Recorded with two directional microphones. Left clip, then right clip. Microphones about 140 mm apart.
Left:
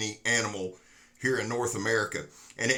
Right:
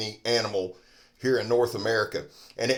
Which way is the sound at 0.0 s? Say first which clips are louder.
Right 2 dB; 50° right (ahead or behind).